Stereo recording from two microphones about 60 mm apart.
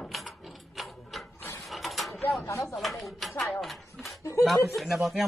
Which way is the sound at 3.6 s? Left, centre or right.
Centre.